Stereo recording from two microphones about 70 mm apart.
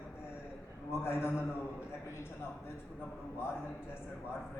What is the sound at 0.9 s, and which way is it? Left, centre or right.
A man's voice, left.